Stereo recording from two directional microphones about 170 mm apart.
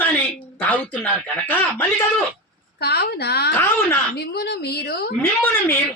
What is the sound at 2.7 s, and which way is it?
A woman's voice, 70° left (ahead or behind).